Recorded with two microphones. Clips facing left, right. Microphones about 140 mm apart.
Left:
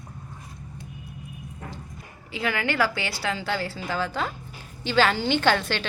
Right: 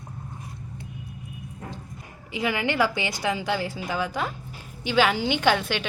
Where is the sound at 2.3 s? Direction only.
15° right (ahead or behind).